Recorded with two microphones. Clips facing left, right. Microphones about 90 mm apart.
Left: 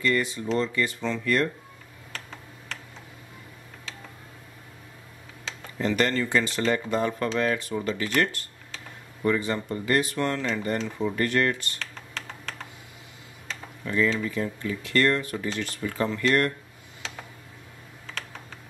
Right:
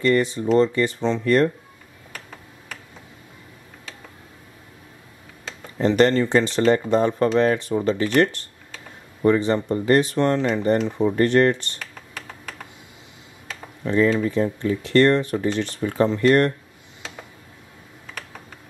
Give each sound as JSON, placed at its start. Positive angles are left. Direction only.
{"t": 0.0, "sound": "speech", "side_deg": -35}
{"t": 5.8, "sound": "speech", "side_deg": -30}
{"t": 11.8, "sound": "computer keyboard", "side_deg": -10}
{"t": 13.8, "sound": "speech", "side_deg": -30}